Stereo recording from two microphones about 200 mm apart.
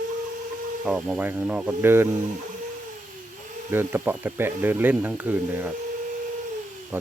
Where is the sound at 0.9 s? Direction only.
5° right (ahead or behind).